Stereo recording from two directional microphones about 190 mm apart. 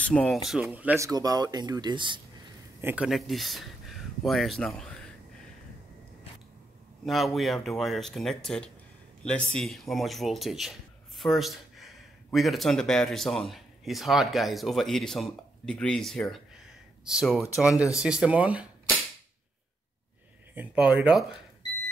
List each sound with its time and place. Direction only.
0.0 s speech: 5° left (ahead or behind); by 2.2 s 25° right (ahead or behind)
2.8 s speech: 10° right (ahead or behind)
7.1 s speech: centre (ahead or behind)
20.5 s speech: 5° right (ahead or behind)